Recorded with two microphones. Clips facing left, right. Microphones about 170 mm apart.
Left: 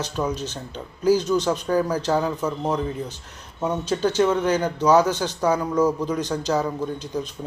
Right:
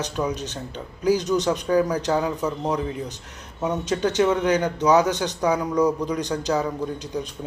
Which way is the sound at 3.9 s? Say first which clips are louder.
Even; 20° right (ahead or behind).